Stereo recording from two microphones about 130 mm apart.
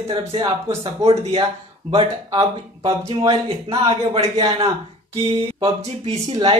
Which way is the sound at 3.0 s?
50° right (ahead or behind).